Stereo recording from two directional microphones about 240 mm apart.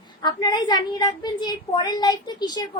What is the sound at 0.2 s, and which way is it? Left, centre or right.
A child's voice, centre.